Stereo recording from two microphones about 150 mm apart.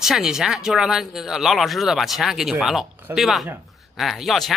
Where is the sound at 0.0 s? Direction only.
5° right (ahead or behind).